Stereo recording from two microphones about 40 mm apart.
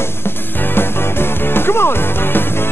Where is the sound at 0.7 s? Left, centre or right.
Left.